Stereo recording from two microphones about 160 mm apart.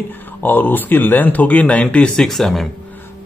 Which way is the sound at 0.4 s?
10° left (ahead or behind).